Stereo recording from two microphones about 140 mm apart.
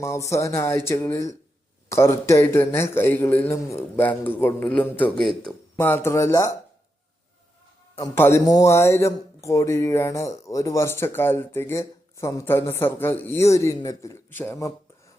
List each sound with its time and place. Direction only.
0.0 s a man's voice: 20° left (ahead or behind)
7.9 s speech: 20° left (ahead or behind)